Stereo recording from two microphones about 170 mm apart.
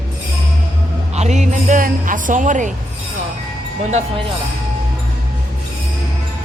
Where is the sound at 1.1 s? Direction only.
40° right (ahead or behind).